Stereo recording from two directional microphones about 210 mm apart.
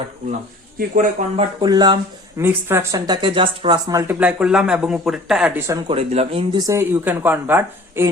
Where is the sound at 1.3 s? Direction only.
20° right (ahead or behind); by 5.6 s 5° right (ahead or behind).